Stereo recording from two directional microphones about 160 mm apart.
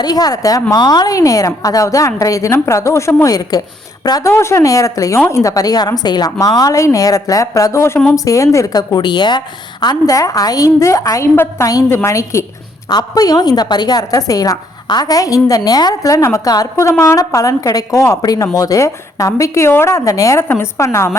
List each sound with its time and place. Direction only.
0.0 s a woman's voice: 25° left (ahead or behind)